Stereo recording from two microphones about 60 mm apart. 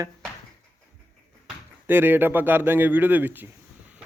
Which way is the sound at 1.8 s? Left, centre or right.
Right.